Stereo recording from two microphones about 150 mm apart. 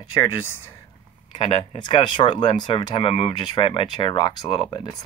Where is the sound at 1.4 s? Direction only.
35° left (ahead or behind).